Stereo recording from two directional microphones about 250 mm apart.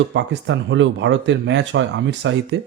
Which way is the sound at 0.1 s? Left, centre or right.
Right.